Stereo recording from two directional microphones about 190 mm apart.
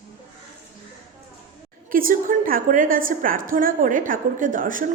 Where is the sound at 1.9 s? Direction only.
45° right (ahead or behind).